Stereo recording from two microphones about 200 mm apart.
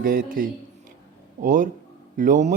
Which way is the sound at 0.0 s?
45° right (ahead or behind).